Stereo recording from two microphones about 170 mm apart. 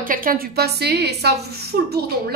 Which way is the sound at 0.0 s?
55° right (ahead or behind).